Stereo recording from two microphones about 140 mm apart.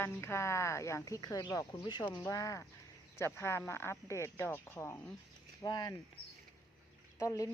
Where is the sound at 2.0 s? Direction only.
10° left (ahead or behind).